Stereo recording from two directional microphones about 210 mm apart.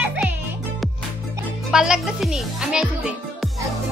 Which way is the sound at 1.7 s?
5° right (ahead or behind).